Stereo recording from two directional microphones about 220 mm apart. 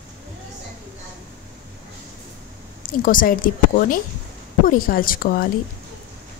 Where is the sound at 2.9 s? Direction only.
40° left (ahead or behind).